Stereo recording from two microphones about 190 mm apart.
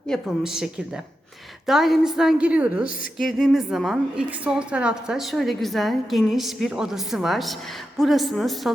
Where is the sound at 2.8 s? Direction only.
45° left (ahead or behind).